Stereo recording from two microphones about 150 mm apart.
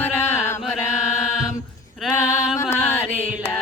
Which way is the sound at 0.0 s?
15° left (ahead or behind).